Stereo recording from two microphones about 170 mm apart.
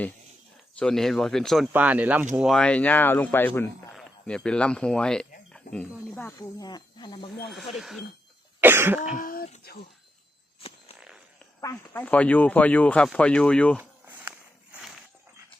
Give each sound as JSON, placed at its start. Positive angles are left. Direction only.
{"t": 0.8, "sound": "speech", "side_deg": 5}
{"t": 1.6, "sound": "speech", "side_deg": -10}
{"t": 6.6, "sound": "speech", "side_deg": 25}
{"t": 7.4, "sound": "speech", "side_deg": 0}
{"t": 8.6, "sound": "speech", "side_deg": -10}
{"t": 9.1, "sound": "speech", "side_deg": 55}
{"t": 11.6, "sound": "speech", "side_deg": 15}
{"t": 14.3, "sound": "walk", "side_deg": -5}